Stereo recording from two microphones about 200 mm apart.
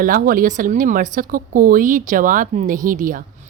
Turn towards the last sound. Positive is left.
turn(degrees=-40)  # may be behind; listen again after turning